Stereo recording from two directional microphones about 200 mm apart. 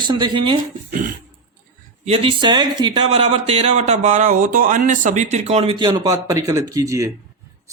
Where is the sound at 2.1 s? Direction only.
30° right (ahead or behind).